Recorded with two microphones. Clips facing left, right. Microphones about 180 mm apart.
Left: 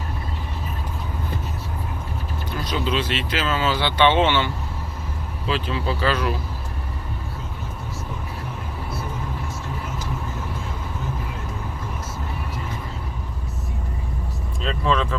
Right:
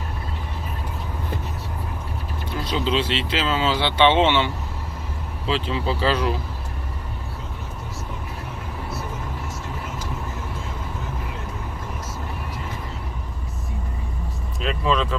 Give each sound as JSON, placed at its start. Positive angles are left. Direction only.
{"t": 2.6, "sound": "speech", "side_deg": -25}
{"t": 14.6, "sound": "speech", "side_deg": -10}